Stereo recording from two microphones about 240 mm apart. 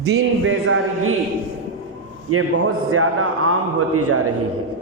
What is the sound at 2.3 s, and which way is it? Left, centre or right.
A man's voice, right.